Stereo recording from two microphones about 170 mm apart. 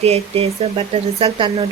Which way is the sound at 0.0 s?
35° right (ahead or behind).